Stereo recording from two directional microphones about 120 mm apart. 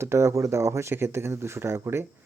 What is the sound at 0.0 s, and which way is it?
Speech, 20° right (ahead or behind).